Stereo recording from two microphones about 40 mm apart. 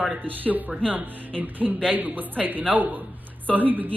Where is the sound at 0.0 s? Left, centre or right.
Right.